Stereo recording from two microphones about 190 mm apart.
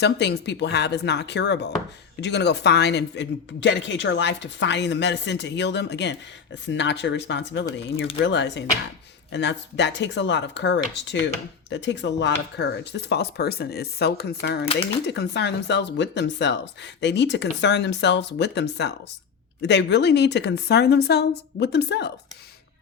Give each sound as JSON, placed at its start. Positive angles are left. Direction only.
{"t": 0.0, "sound": "speech", "side_deg": 65}
{"t": 14.7, "sound": "speech", "side_deg": 30}
{"t": 15.0, "sound": "speech", "side_deg": 60}